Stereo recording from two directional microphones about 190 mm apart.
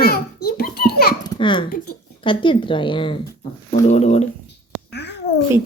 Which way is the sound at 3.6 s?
40° left (ahead or behind).